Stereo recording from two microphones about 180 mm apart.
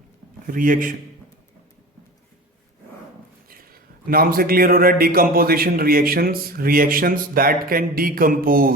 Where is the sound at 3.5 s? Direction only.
55° right (ahead or behind).